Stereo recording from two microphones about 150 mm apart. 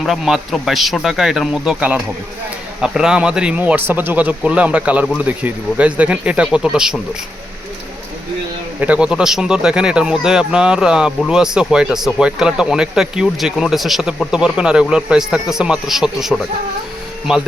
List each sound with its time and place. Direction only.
0.0 s speech: centre (ahead or behind)
8.8 s speech: 10° right (ahead or behind)